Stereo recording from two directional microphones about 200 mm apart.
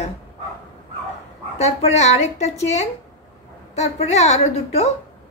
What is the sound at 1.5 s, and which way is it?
Speech, 35° left (ahead or behind).